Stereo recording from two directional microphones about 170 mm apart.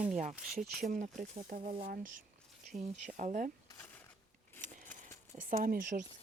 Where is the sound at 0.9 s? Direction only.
50° right (ahead or behind).